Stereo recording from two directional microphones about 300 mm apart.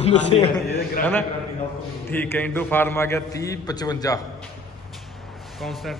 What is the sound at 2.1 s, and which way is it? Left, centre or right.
A man's voice, centre.